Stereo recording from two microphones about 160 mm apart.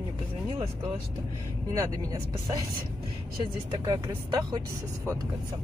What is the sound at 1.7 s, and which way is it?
Speech, 20° right (ahead or behind).